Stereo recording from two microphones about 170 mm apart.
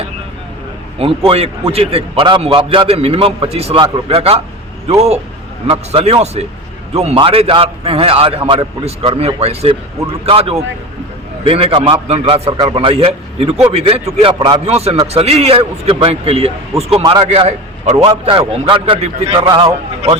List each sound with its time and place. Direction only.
0.9 s a man's voice: 35° right (ahead or behind)
17.0 s a man's voice: 25° right (ahead or behind)
17.2 s a man's voice: 35° right (ahead or behind)
19.3 s a man's voice: 25° right (ahead or behind)